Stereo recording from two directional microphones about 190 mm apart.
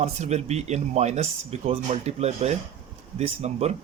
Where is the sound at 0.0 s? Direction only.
35° right (ahead or behind).